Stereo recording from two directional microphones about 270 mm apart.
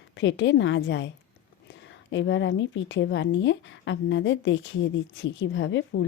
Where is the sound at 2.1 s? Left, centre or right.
Left.